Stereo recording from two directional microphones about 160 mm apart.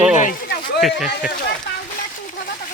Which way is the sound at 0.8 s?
Centre (ahead or behind).